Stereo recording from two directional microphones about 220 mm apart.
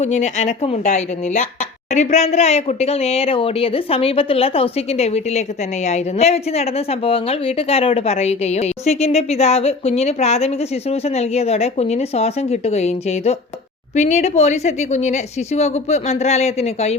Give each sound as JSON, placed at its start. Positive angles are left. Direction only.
{"t": 0.0, "sound": "a woman's voice", "side_deg": 30}